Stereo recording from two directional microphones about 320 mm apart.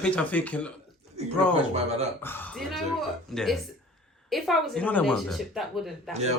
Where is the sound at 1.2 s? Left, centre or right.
Centre.